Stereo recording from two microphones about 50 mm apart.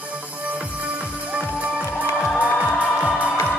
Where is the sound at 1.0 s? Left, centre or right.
Right.